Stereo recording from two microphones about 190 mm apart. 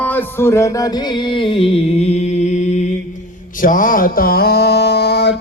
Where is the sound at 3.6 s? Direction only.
45° left (ahead or behind); by 5.4 s 60° left (ahead or behind).